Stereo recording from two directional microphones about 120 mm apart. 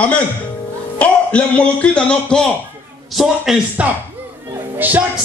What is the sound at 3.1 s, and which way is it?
Speech, 5° right (ahead or behind).